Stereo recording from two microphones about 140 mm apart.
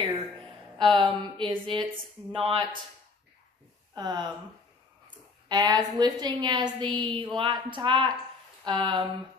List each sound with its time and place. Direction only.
0.0 s a woman's voice: 35° right (ahead or behind)
3.9 s speech: 30° right (ahead or behind)
5.5 s a woman's voice: 30° right (ahead or behind)